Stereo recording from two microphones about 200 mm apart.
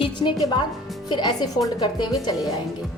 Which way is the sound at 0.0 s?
25° left (ahead or behind).